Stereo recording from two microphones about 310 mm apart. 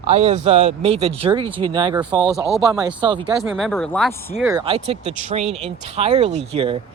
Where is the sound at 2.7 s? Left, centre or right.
Centre.